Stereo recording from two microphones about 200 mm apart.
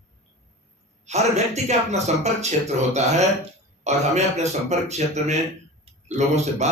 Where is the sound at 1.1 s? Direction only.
35° right (ahead or behind).